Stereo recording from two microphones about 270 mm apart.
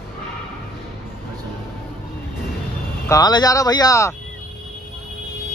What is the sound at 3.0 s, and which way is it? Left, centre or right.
A man's voice, centre.